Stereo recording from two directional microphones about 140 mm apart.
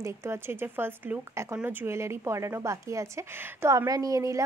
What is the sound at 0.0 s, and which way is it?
Speech, 20° right (ahead or behind).